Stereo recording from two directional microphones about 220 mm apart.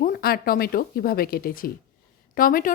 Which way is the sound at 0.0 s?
45° left (ahead or behind).